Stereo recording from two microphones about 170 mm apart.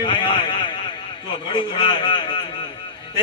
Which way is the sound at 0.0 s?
30° left (ahead or behind).